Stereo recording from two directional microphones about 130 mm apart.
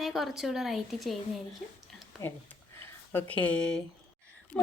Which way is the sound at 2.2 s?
25° left (ahead or behind).